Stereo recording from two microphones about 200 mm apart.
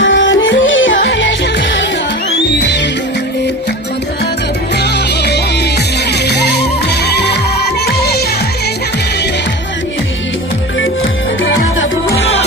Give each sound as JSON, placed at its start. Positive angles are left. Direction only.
{"t": 0.0, "sound": "music", "side_deg": 70}
{"t": 4.8, "sound": "music", "side_deg": 55}
{"t": 11.8, "sound": "music", "side_deg": 60}